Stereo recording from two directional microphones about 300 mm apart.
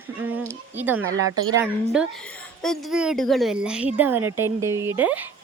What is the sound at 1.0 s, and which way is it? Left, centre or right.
Speech, right.